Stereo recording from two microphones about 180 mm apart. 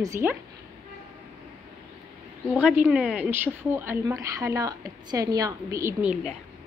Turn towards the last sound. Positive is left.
turn(degrees=-5)  # may be behind; listen again after turning